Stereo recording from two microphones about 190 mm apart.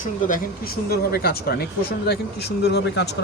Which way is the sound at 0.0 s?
50° left (ahead or behind).